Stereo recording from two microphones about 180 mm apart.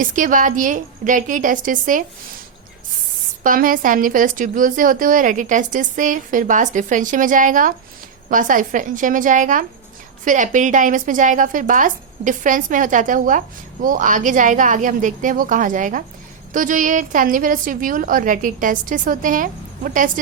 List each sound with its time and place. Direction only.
0.0 s a woman's voice: 45° right (ahead or behind)
3.4 s a woman's voice: 50° right (ahead or behind)